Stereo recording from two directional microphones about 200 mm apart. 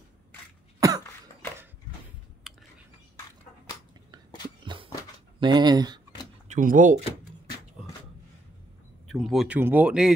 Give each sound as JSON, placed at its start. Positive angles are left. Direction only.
{"t": 0.7, "sound": "cough", "side_deg": -15}
{"t": 2.4, "sound": "whispering", "side_deg": 0}
{"t": 5.4, "sound": "speech", "side_deg": -20}
{"t": 6.4, "sound": "speech", "side_deg": -40}
{"t": 9.0, "sound": "speech", "side_deg": 0}